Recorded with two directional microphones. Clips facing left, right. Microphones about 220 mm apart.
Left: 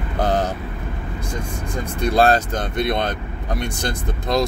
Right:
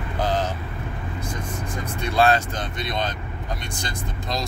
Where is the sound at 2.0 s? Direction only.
40° left (ahead or behind).